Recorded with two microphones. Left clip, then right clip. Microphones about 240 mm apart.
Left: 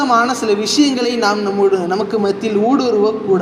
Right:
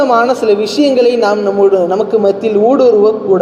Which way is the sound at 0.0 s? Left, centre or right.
Left.